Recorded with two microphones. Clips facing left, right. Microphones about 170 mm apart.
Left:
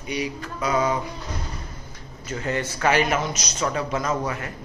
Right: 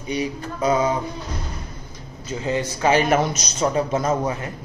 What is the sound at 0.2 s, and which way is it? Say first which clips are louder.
Speech: right 5 dB; 25° right (ahead or behind).